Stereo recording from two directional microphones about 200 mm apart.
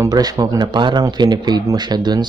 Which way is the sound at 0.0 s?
20° right (ahead or behind).